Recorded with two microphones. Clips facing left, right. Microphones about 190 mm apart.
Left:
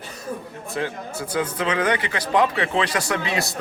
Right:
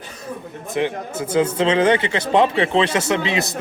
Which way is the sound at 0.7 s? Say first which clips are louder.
Right 6 dB; 20° right (ahead or behind).